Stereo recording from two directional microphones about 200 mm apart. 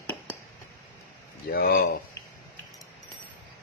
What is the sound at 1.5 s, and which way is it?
Speech, 50° left (ahead or behind).